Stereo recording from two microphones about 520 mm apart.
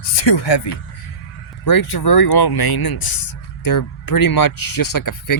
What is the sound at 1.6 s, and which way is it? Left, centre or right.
Speech, left.